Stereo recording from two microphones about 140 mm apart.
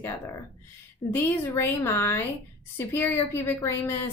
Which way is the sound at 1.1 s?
15° left (ahead or behind).